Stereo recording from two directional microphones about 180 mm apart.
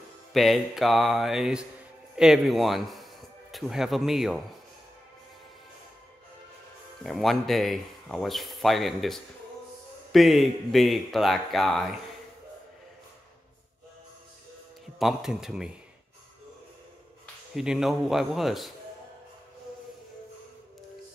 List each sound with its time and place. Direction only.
0.3 s speech: centre (ahead or behind)
7.0 s speech: centre (ahead or behind)
15.0 s speech: centre (ahead or behind)
17.6 s speech: centre (ahead or behind)